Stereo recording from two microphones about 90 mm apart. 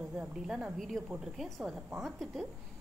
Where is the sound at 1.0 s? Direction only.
Centre (ahead or behind).